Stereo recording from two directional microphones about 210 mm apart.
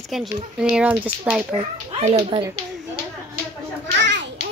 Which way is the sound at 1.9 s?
30° right (ahead or behind).